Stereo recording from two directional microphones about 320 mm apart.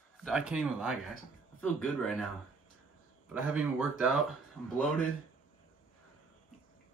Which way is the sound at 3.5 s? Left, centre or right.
Centre.